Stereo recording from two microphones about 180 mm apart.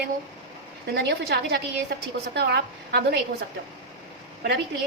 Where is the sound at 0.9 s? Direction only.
60° right (ahead or behind).